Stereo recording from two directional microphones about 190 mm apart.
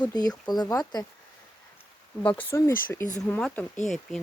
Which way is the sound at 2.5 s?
15° left (ahead or behind).